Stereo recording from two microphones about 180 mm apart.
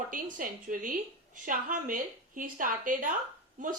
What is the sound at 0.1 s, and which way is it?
Speech, 50° right (ahead or behind).